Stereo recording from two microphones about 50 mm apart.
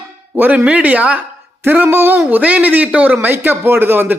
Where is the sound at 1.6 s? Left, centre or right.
Right.